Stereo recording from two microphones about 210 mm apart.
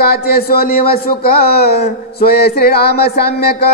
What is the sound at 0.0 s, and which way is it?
Speech, 45° left (ahead or behind).